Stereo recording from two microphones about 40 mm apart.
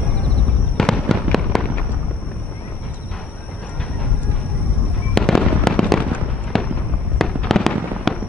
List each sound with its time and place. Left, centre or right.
0.7 s fireworks: centre
5.1 s fireworks: centre
5.6 s fireworks: left
6.5 s fireworks: centre